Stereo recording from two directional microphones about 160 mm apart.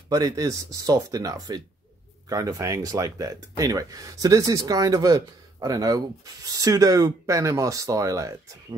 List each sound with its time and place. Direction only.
0.1 s speech: 20° right (ahead or behind)